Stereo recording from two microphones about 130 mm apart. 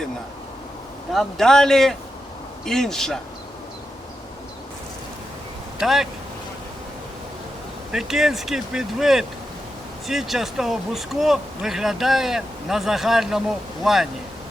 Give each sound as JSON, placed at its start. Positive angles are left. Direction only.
{"t": 1.1, "sound": "speech", "side_deg": 5}
{"t": 5.8, "sound": "speech", "side_deg": 0}
{"t": 7.9, "sound": "speech", "side_deg": 0}